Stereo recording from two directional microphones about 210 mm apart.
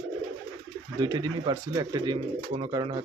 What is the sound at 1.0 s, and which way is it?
Speech, 20° right (ahead or behind).